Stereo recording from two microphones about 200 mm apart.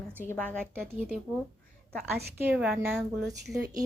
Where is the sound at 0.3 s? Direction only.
5° left (ahead or behind).